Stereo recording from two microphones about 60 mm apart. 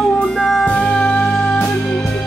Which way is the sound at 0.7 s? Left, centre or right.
Centre.